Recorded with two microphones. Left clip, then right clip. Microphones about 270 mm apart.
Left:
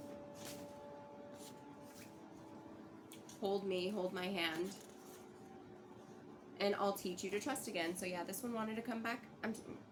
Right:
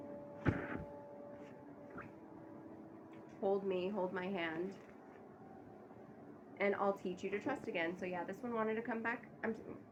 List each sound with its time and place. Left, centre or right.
3.4 s a woman's voice: centre
6.6 s a woman's voice: centre